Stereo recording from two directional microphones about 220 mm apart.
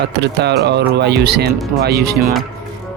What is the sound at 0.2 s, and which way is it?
Speech, 50° right (ahead or behind).